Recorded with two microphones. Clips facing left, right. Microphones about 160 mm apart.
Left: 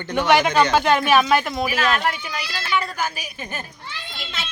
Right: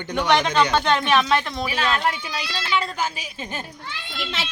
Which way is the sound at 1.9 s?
25° right (ahead or behind).